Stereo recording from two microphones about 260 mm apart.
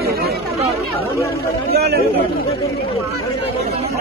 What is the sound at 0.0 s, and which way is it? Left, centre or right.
Chatter, right.